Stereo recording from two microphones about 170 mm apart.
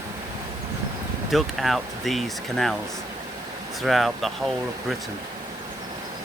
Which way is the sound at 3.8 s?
Centre (ahead or behind).